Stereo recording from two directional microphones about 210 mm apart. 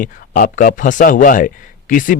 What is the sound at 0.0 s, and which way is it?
Speech, 40° left (ahead or behind).